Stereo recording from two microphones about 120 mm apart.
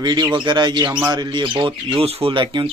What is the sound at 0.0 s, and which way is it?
Speech, 40° right (ahead or behind).